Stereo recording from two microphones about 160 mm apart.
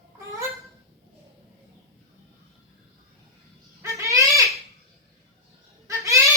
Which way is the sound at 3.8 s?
20° right (ahead or behind).